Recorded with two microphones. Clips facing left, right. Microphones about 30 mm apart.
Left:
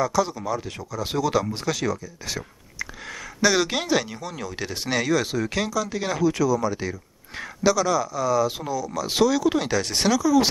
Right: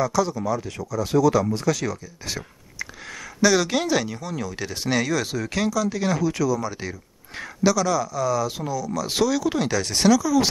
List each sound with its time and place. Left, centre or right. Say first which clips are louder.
0.0 s speech: right 1 dB; centre
1.0 s speech: right 4 dB; left
1.9 s speech: left 2 dB; centre